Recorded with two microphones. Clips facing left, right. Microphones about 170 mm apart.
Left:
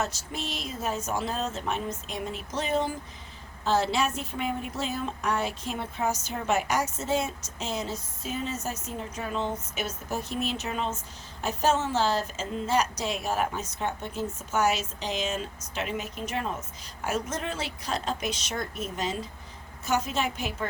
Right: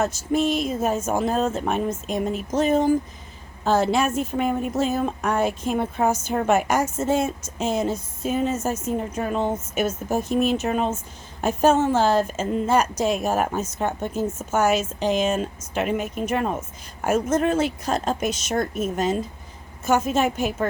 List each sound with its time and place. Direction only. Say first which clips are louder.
0.0 s a woman's voice: right 11 dB; 50° right (ahead or behind)